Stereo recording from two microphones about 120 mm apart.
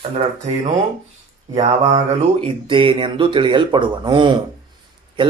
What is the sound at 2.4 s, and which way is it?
Speech, 45° right (ahead or behind).